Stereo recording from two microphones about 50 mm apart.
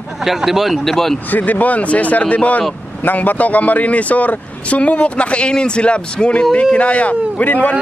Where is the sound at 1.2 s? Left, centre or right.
Left.